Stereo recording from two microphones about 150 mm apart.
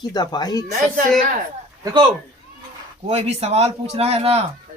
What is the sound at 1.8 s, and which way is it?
Speech, 30° right (ahead or behind).